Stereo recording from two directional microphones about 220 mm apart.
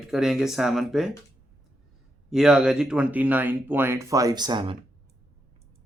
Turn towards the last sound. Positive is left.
turn(degrees=-20)  # may be behind; listen again after turning